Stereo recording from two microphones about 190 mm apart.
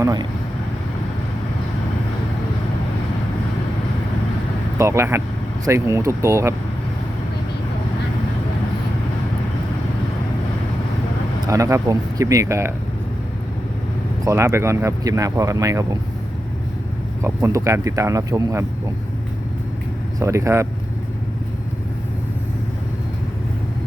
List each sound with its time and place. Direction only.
0.0 s speech: 20° right (ahead or behind)
4.8 s speech: 15° right (ahead or behind)
11.4 s speech: 15° right (ahead or behind)
14.3 s speech: 15° right (ahead or behind)
17.2 s speech: 15° right (ahead or behind)
20.1 s speech: 15° right (ahead or behind)